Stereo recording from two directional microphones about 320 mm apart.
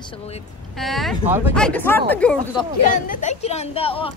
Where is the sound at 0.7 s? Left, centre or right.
Centre.